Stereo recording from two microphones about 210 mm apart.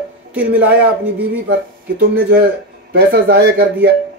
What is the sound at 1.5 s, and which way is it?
Speech, 50° right (ahead or behind).